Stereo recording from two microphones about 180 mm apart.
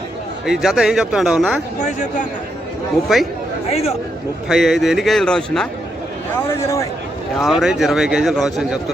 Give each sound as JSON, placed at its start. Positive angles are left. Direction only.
{"t": 0.4, "sound": "speech", "side_deg": -5}
{"t": 3.1, "sound": "speech", "side_deg": 0}
{"t": 3.7, "sound": "speech", "side_deg": 35}
{"t": 4.4, "sound": "speech", "side_deg": 0}
{"t": 6.5, "sound": "a man's voice", "side_deg": 15}
{"t": 7.3, "sound": "speech", "side_deg": 0}